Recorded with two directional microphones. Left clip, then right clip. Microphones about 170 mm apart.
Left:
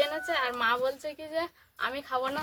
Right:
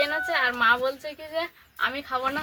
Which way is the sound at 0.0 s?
25° left (ahead or behind).